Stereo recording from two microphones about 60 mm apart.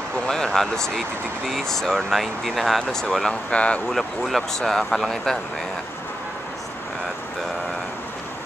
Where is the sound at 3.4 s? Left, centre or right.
Centre.